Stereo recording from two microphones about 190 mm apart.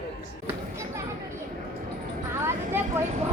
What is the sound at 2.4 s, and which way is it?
Speech, 10° right (ahead or behind).